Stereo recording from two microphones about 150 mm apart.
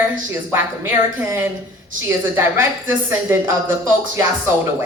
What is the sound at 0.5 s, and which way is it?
A woman's voice, 15° right (ahead or behind).